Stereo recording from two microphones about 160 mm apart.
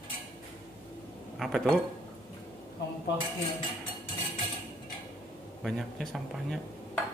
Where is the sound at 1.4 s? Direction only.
Centre (ahead or behind).